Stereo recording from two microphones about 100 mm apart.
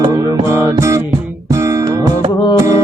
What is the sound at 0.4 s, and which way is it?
Music, 25° right (ahead or behind).